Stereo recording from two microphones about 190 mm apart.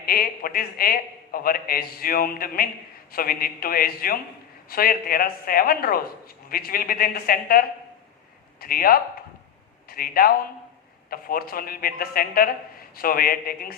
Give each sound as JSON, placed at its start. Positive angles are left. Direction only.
{"t": 0.0, "sound": "a man's voice", "side_deg": 50}
{"t": 8.6, "sound": "a man's voice", "side_deg": 50}